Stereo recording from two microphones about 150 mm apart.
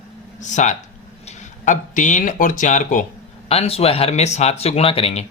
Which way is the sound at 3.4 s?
40° left (ahead or behind).